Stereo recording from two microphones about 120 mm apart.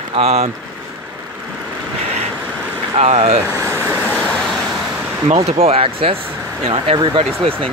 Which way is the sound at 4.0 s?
10° left (ahead or behind).